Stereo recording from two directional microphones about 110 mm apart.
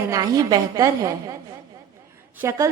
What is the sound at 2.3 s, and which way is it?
Speech, 25° right (ahead or behind).